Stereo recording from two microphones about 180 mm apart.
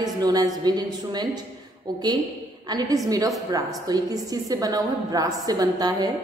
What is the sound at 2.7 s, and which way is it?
A man's voice, 25° right (ahead or behind).